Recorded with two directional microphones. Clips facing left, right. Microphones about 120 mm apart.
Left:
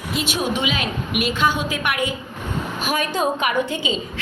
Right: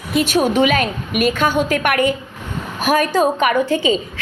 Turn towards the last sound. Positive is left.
turn(degrees=-45)  # may be behind; listen again after turning